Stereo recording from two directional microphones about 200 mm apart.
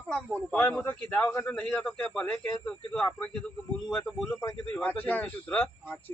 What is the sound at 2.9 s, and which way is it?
Music, 5° left (ahead or behind).